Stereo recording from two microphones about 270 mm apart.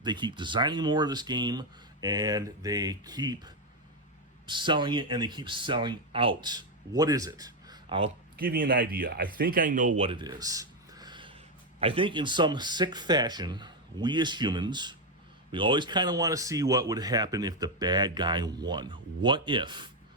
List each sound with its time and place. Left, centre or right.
0.0 s speech: centre
8.4 s speech: right
10.0 s a sound: centre
11.8 s speech: centre